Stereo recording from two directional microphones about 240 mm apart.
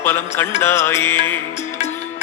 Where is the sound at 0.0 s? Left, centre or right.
Centre.